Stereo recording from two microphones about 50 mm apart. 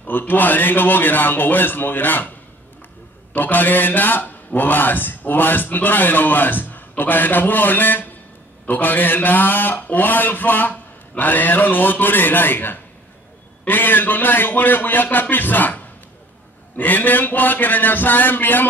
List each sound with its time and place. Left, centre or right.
0.0 s a man's voice: left
3.3 s a man's voice: left